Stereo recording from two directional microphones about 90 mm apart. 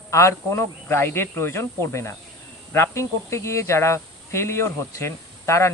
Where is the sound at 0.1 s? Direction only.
30° left (ahead or behind).